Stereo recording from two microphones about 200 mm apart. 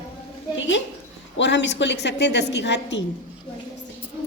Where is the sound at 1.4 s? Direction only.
60° left (ahead or behind).